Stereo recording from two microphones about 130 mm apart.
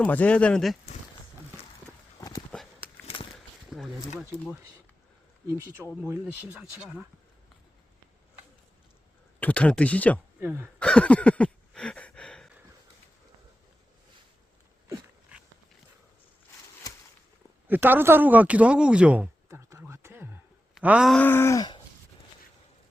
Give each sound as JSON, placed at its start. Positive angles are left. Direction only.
{"t": 0.0, "sound": "speech", "side_deg": 10}
{"t": 2.5, "sound": "horse", "side_deg": 10}
{"t": 3.3, "sound": "a sound", "side_deg": 0}
{"t": 5.5, "sound": "speech", "side_deg": -20}
{"t": 6.2, "sound": "speech", "side_deg": -5}
{"t": 9.4, "sound": "speech", "side_deg": 10}
{"t": 10.4, "sound": "speech", "side_deg": -15}
{"t": 10.8, "sound": "a sound", "side_deg": 10}
{"t": 17.7, "sound": "speech", "side_deg": -15}
{"t": 19.5, "sound": "a sound", "side_deg": -20}
{"t": 20.7, "sound": "groan", "side_deg": -5}
{"t": 21.1, "sound": "speech", "side_deg": 15}